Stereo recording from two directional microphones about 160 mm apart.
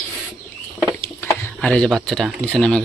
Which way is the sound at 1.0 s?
15° left (ahead or behind).